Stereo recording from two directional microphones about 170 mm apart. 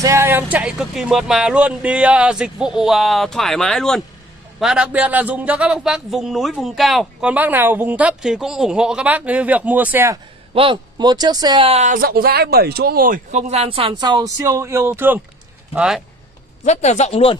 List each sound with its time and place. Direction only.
0.0 s a man's voice: 15° right (ahead or behind)
10.5 s speech: 30° right (ahead or behind)
11.8 s speech: 55° right (ahead or behind); by 16.0 s 5° right (ahead or behind)
16.6 s speech: 45° left (ahead or behind)